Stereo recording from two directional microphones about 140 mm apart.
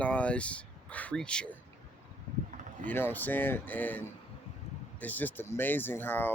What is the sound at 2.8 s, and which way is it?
Speech, 15° left (ahead or behind).